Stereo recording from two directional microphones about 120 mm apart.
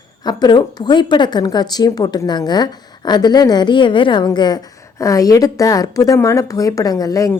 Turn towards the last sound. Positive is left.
turn(degrees=30)  # may be behind; listen again after turning